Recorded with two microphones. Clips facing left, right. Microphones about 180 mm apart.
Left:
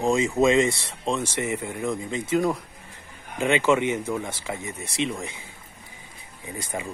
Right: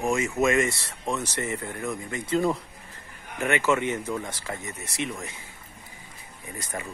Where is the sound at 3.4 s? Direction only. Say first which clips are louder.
Left 3 dB; 15° left (ahead or behind).